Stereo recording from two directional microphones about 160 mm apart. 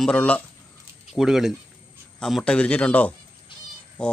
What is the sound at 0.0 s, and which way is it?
Speech, 5° left (ahead or behind).